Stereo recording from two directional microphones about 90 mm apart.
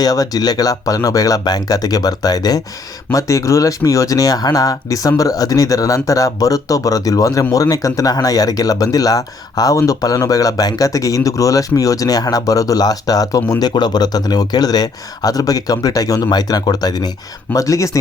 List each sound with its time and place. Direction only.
0.0 s speech: 45° left (ahead or behind)
17.5 s speech: 40° left (ahead or behind)